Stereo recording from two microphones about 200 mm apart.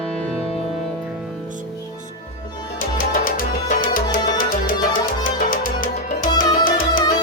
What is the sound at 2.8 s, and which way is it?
Music, 45° left (ahead or behind).